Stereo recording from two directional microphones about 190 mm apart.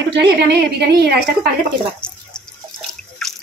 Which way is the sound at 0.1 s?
55° right (ahead or behind).